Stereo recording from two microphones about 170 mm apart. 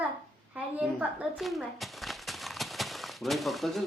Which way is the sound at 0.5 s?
5° right (ahead or behind).